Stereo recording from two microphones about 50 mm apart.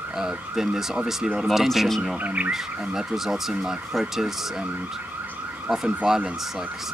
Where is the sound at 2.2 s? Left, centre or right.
Right.